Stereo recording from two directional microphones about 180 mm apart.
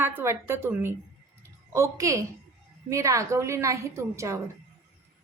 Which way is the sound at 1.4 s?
15° right (ahead or behind).